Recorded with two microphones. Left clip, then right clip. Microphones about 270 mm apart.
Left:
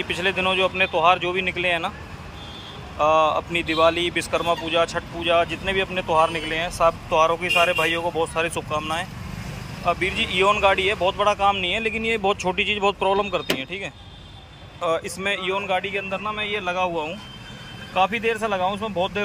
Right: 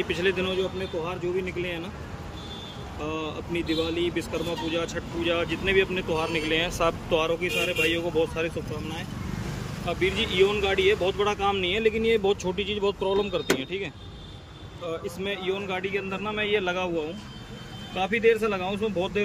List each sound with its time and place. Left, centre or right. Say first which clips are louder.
0.0 s speech: left 3 dB; centre
3.0 s speech: left 15 dB; left
3.9 s speech: left 5 dB; centre